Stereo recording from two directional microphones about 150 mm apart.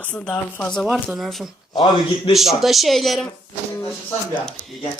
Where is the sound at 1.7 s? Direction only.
30° left (ahead or behind).